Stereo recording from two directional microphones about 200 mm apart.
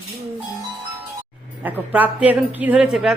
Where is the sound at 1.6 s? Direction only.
10° right (ahead or behind).